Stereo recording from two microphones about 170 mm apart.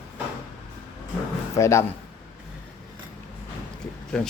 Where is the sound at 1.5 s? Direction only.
15° left (ahead or behind).